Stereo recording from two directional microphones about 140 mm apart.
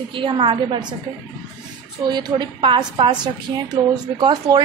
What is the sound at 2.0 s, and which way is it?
A woman's voice, 30° right (ahead or behind).